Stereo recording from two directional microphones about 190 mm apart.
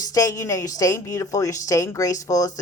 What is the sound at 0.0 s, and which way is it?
Speech, 20° left (ahead or behind).